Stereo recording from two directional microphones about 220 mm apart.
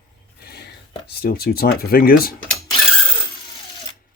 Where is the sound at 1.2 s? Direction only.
45° left (ahead or behind).